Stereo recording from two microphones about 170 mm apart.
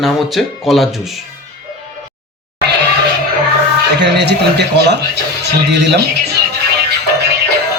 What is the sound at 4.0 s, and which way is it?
A man's voice, 90° right.